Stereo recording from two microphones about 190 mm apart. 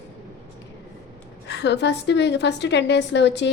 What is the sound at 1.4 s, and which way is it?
A woman's voice, 65° left (ahead or behind).